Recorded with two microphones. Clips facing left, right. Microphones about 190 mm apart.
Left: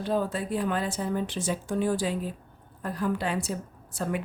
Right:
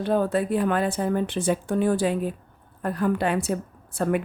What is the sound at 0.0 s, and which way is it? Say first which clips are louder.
Speech: right 5 dB; 60° right (ahead or behind).